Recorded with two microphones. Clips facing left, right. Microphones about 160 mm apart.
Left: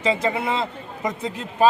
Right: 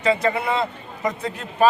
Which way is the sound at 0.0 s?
20° left (ahead or behind).